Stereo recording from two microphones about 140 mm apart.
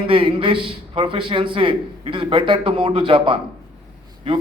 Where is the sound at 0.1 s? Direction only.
40° right (ahead or behind).